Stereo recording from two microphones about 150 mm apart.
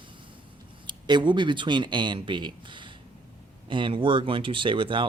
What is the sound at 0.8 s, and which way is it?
Speech, 30° right (ahead or behind).